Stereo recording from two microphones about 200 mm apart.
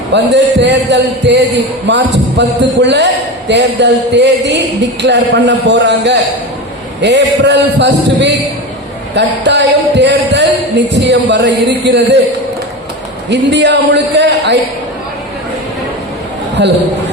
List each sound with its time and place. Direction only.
0.1 s a man's voice: 60° right (ahead or behind)
13.3 s a man's voice: 60° right (ahead or behind)
16.6 s a man's voice: 60° right (ahead or behind)